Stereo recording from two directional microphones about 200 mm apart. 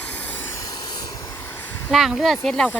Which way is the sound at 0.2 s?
10° left (ahead or behind).